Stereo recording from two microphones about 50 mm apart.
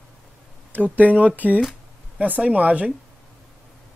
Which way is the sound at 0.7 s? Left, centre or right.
Right.